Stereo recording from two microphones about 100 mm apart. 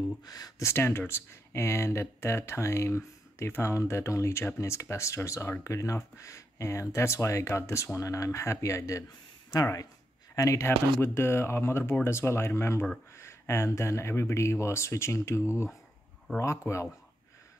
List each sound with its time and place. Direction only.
0.2 s speech: 40° left (ahead or behind)
0.7 s speech: 25° left (ahead or behind)